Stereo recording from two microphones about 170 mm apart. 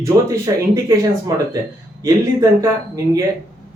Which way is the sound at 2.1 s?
20° right (ahead or behind).